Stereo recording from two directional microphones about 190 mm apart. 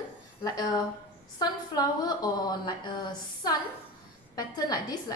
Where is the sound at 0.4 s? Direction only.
20° left (ahead or behind).